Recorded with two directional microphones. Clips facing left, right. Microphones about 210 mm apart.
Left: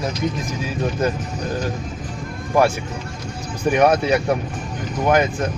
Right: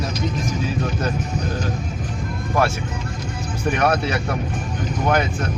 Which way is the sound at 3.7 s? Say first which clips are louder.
Left 5 dB; 10° left (ahead or behind).